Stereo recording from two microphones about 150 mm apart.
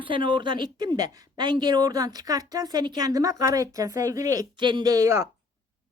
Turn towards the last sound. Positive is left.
turn(degrees=-20)  # may be behind; listen again after turning